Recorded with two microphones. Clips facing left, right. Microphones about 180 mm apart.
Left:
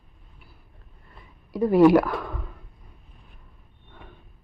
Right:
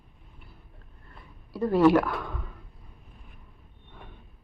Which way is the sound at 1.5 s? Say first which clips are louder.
Left 4 dB; 15° left (ahead or behind).